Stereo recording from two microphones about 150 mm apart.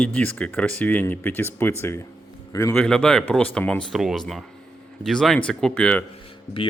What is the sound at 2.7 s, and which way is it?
Speech, 5° left (ahead or behind).